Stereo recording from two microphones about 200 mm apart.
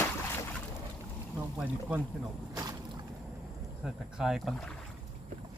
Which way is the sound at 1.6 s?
5° right (ahead or behind).